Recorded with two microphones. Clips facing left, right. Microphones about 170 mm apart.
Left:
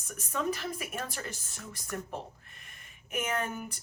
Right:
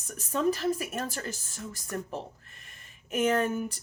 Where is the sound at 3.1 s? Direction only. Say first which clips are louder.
Right 7 dB; 35° right (ahead or behind).